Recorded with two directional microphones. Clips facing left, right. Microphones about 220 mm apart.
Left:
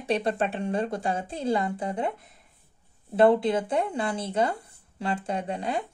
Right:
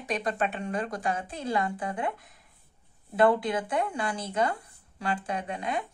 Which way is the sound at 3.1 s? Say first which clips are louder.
Left 4 dB; 25° left (ahead or behind).